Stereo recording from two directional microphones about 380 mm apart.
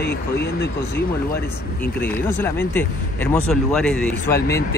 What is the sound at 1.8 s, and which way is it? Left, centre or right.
Speech, centre.